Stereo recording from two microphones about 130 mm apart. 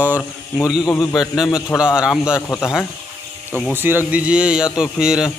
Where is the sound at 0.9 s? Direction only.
30° left (ahead or behind).